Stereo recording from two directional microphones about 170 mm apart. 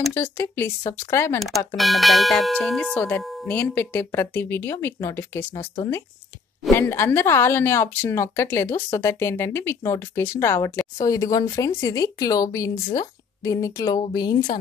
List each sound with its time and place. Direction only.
0.1 s speech: 15° left (ahead or behind)
1.8 s speech: centre (ahead or behind); by 5.6 s 15° left (ahead or behind)
6.7 s speech: 15° left (ahead or behind)